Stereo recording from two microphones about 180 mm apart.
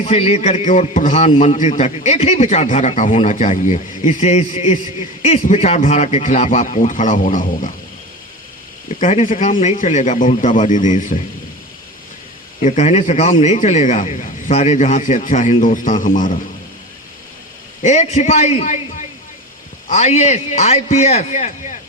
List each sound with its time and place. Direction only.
0.0 s a man's voice: 35° left (ahead or behind)
9.0 s speech: 40° left (ahead or behind)
12.6 s a man's voice: 40° left (ahead or behind)
17.8 s a man's voice: 40° left (ahead or behind)